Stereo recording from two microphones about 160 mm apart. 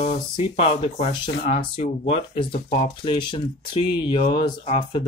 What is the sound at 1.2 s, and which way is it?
Speech, 50° left (ahead or behind).